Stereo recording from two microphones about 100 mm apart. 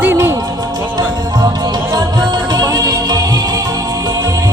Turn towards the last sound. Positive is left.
turn(degrees=-35)  # may be behind; listen again after turning